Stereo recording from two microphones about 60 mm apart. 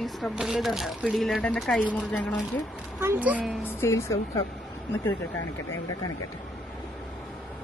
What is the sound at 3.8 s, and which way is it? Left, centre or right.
Speech, left.